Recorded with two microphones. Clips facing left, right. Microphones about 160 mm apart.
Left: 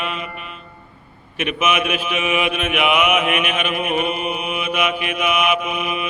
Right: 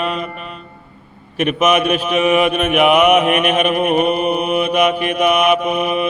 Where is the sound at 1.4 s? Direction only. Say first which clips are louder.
Right 6 dB; 40° right (ahead or behind).